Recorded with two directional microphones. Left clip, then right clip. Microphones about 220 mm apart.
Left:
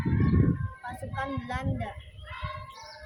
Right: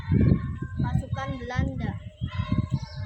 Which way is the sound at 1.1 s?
5° right (ahead or behind).